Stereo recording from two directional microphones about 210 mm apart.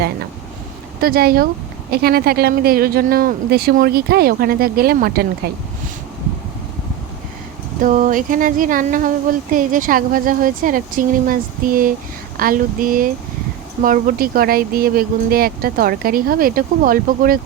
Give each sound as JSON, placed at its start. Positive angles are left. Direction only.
{"t": 1.0, "sound": "speech", "side_deg": -45}
{"t": 7.8, "sound": "speech", "side_deg": -40}